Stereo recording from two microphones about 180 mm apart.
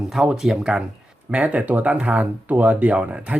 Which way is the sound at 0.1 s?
Centre (ahead or behind).